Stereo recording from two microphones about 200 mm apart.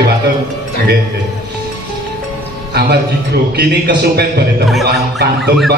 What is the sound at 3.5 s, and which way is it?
Speech, 55° right (ahead or behind).